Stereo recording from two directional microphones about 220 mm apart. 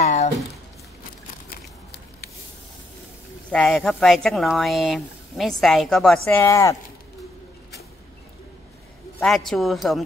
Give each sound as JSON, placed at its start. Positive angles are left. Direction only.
{"t": 0.0, "sound": "a sound", "side_deg": 30}
{"t": 3.5, "sound": "speech", "side_deg": 0}
{"t": 9.2, "sound": "speech", "side_deg": 0}